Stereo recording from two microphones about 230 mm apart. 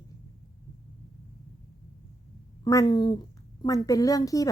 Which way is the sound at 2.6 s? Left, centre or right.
Centre.